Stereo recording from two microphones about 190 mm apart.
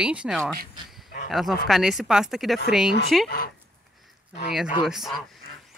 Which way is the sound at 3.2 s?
55° left (ahead or behind).